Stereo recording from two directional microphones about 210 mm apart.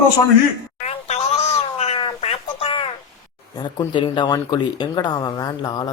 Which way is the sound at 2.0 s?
25° left (ahead or behind).